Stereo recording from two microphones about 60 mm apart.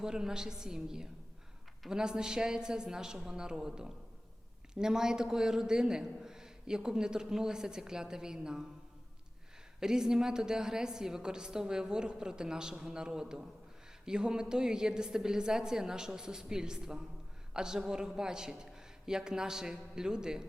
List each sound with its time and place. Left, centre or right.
0.0 s a man's voice: centre
9.8 s a man's voice: centre